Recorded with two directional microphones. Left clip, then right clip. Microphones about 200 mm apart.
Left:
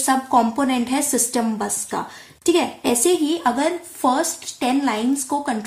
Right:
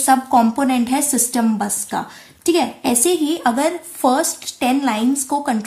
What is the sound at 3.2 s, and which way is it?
A woman's voice, 40° right (ahead or behind).